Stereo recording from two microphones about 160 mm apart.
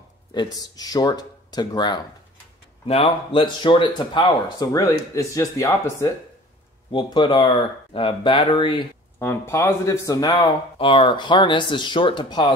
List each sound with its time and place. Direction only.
0.7 s speech: 25° left (ahead or behind)
2.9 s speech: 40° left (ahead or behind)
4.7 s speech: 20° left (ahead or behind)
6.9 s speech: 30° left (ahead or behind)
9.2 s speech: 15° left (ahead or behind)